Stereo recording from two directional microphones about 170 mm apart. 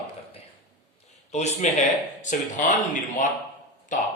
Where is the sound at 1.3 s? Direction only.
40° left (ahead or behind).